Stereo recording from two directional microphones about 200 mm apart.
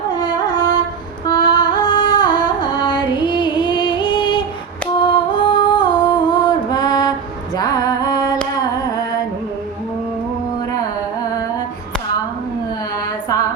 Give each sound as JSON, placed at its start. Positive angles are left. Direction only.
{"t": 0.2, "sound": "music", "side_deg": 20}
{"t": 7.5, "sound": "a sound", "side_deg": 20}
{"t": 8.5, "sound": "humming", "side_deg": 20}